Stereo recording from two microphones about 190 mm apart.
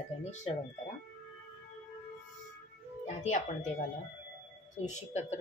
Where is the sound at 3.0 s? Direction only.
40° left (ahead or behind).